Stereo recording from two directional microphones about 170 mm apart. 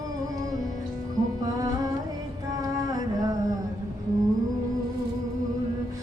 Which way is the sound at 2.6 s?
20° right (ahead or behind).